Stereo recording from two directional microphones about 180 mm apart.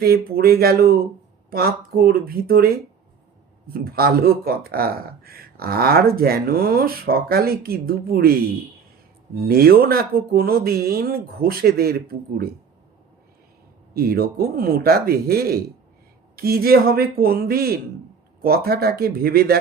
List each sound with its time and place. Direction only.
0.0 s speech: 60° right (ahead or behind)
9.5 s speech: 60° right (ahead or behind)
13.9 s speech: 55° right (ahead or behind)